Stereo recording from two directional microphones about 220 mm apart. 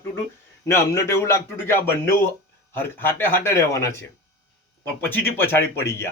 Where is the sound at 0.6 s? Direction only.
10° left (ahead or behind).